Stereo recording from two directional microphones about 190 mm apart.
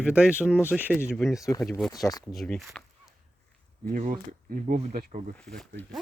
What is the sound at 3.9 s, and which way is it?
Speech, 40° right (ahead or behind).